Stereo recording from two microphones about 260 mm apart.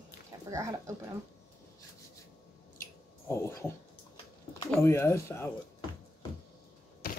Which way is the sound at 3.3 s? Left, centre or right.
Centre.